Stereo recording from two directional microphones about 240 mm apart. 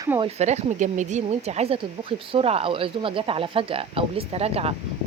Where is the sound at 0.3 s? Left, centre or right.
Right.